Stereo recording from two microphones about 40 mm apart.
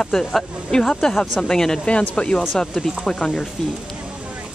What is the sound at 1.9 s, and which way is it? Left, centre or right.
Speech, left.